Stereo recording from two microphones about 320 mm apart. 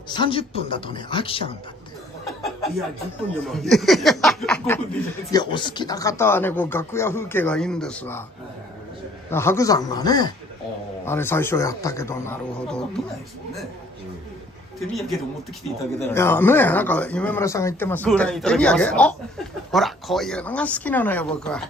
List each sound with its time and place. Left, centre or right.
0.1 s speech: centre
3.4 s speech: centre
9.3 s speech: centre
14.8 s speech: centre